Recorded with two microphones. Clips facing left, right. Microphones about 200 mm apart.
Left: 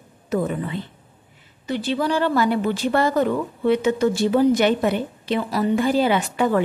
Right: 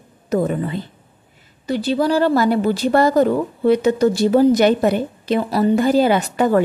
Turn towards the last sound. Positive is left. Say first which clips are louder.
# right 4 dB
turn(degrees=-40)  # may be behind; listen again after turning